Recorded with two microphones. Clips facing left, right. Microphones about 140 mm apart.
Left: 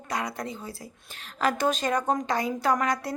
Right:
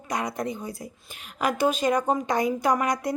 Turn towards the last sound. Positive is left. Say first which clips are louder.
# right 1 dB
turn(degrees=-15)  # may be behind; listen again after turning